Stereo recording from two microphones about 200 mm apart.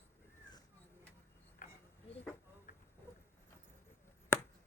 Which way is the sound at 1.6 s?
45° left (ahead or behind).